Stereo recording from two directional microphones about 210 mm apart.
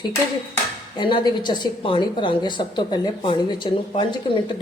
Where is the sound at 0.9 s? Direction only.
20° left (ahead or behind).